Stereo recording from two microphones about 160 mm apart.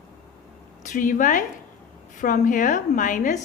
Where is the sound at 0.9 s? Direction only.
55° left (ahead or behind).